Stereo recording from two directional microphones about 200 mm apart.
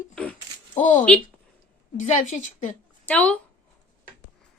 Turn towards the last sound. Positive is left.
turn(degrees=5)  # may be behind; listen again after turning